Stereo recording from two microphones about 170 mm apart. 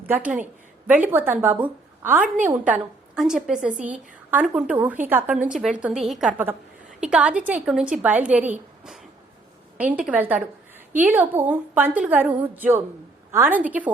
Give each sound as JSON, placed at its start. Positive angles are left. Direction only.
{"t": 0.1, "sound": "a woman's voice", "side_deg": -10}